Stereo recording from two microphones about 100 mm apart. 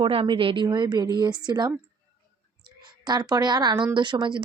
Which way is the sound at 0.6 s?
45° right (ahead or behind).